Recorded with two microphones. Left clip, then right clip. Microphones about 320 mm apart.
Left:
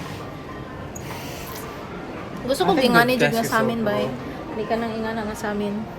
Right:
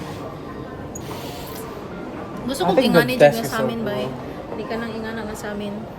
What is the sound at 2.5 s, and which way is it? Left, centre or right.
A woman's voice, centre.